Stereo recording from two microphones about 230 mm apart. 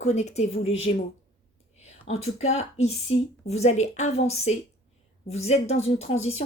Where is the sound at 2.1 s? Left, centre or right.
Left.